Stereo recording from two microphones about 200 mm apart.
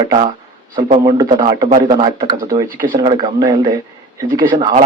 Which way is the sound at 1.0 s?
20° right (ahead or behind).